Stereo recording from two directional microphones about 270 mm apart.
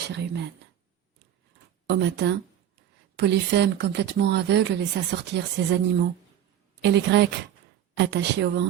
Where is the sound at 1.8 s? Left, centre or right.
Right.